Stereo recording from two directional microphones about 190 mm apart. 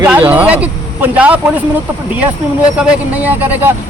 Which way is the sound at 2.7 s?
5° right (ahead or behind).